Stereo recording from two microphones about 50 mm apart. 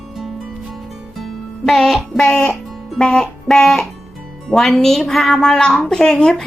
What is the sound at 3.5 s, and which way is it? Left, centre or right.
A woman's voice, centre.